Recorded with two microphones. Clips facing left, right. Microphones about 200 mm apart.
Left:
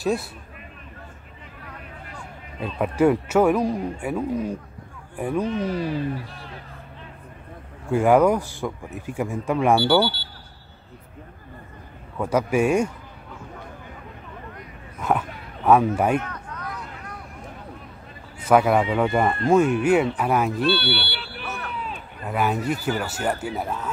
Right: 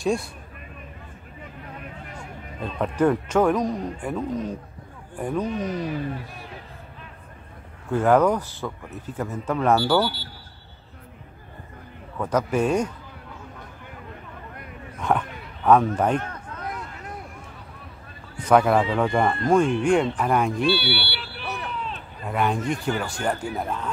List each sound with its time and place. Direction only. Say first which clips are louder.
0.0 s speech: even; 5° left (ahead or behind)
2.6 s speech: left 2 dB; 10° left (ahead or behind)
7.9 s speech: left 2 dB; 10° left (ahead or behind)
9.8 s speech: left 2 dB; 25° left (ahead or behind)
12.2 s speech: left 2 dB; 10° left (ahead or behind)
15.0 s dog: even; 5° left (ahead or behind)
16.3 s a sound: right 1 dB; 25° right (ahead or behind)
18.4 s speech: even; 5° left (ahead or behind)
21.2 s smoke detector: even; centre (ahead or behind)
21.7 s speech: even; 5° left (ahead or behind)